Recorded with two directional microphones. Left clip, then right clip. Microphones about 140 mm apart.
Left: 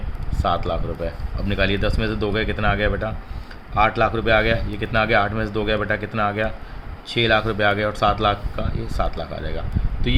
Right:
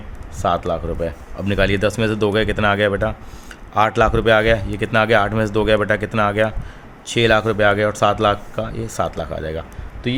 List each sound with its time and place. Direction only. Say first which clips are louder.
0.4 s speech: right 3 dB; 40° right (ahead or behind)